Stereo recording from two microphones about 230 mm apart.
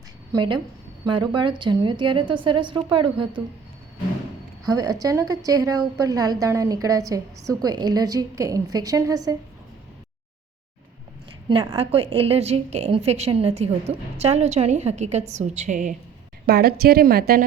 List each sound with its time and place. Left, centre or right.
0.3 s a woman's voice: right
4.6 s a woman's voice: centre
11.4 s a woman's voice: centre
16.5 s a woman's voice: right